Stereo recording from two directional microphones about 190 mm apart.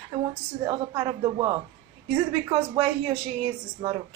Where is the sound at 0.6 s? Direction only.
25° right (ahead or behind).